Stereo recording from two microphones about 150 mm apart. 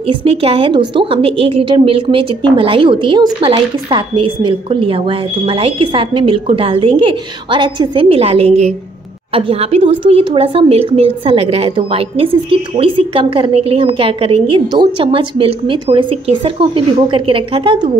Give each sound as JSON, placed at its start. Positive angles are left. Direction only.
{"t": 0.0, "sound": "a woman's voice", "side_deg": -40}